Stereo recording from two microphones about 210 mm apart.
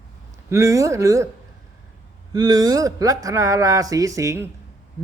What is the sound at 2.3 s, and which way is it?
Speech, 20° right (ahead or behind).